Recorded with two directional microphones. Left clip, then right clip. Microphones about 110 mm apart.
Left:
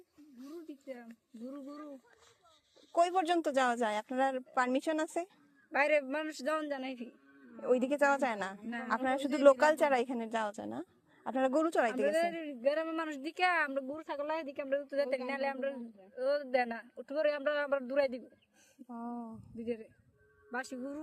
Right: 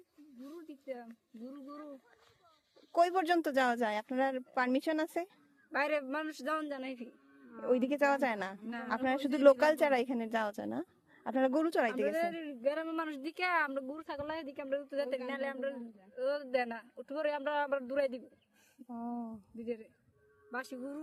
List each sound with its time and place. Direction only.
0.7 s a sound: 5° left (ahead or behind)
1.4 s speech: 15° left (ahead or behind)
2.9 s speech: 40° right (ahead or behind)
5.7 s speech: centre (ahead or behind)
7.5 s speech: 25° right (ahead or behind)
12.0 s speech: centre (ahead or behind)
18.9 s speech: 25° right (ahead or behind)
19.5 s speech: centre (ahead or behind)